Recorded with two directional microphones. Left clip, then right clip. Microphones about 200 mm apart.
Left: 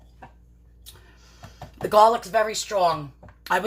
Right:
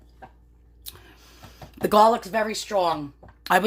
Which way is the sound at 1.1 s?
45° right (ahead or behind).